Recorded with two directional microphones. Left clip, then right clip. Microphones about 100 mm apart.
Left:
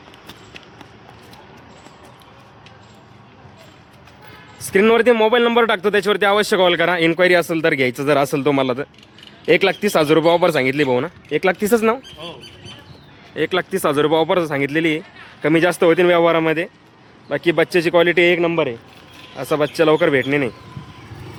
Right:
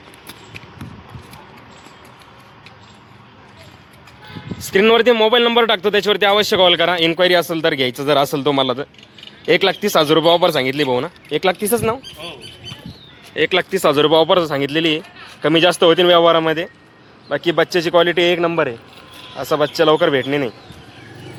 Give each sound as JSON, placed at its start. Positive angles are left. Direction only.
{"t": 4.5, "sound": "a man's voice", "side_deg": 20}
{"t": 11.6, "sound": "speech", "side_deg": 90}
{"t": 13.3, "sound": "a man's voice", "side_deg": -5}
{"t": 19.4, "sound": "a man's voice", "side_deg": 40}